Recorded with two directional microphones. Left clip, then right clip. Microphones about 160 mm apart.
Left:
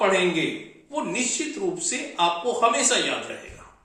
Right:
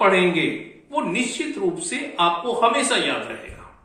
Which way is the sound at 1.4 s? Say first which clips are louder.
Right 3 dB; 10° left (ahead or behind).